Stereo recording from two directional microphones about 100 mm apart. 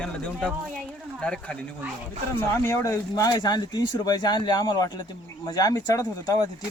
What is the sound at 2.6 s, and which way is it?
Speech, 35° left (ahead or behind).